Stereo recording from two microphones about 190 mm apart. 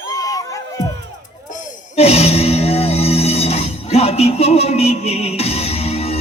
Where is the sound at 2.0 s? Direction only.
35° left (ahead or behind).